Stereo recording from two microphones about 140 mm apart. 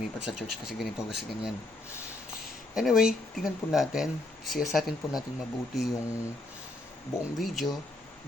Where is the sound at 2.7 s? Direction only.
5° right (ahead or behind).